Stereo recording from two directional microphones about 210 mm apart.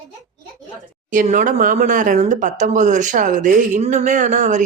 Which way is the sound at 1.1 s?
40° right (ahead or behind).